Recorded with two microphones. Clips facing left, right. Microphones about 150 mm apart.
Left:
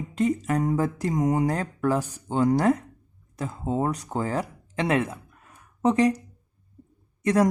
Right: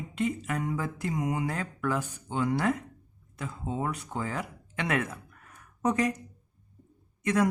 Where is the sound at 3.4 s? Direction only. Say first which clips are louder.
Left 6 dB; 40° left (ahead or behind).